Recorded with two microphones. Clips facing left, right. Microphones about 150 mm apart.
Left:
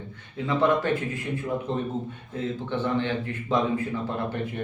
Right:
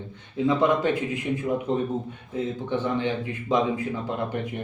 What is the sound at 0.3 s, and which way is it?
Speech, 15° right (ahead or behind).